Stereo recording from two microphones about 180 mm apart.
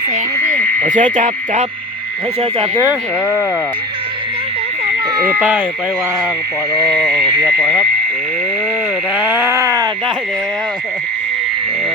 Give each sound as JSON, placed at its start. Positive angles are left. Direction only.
{"t": 0.8, "sound": "speech", "side_deg": -45}
{"t": 2.4, "sound": "speech", "side_deg": -30}
{"t": 2.8, "sound": "speech", "side_deg": -10}
{"t": 5.4, "sound": "speech", "side_deg": -10}
{"t": 9.1, "sound": "speech", "side_deg": -10}